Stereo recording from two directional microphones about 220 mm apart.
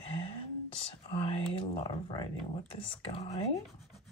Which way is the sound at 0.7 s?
25° left (ahead or behind).